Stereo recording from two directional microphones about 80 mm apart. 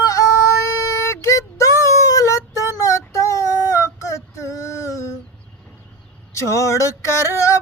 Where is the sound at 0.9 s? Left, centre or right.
Left.